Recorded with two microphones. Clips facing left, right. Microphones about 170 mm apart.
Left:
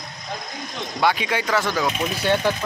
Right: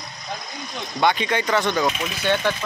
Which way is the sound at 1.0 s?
5° left (ahead or behind).